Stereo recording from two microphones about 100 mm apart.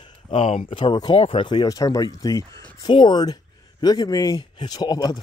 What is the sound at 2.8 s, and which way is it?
Speech, 50° left (ahead or behind).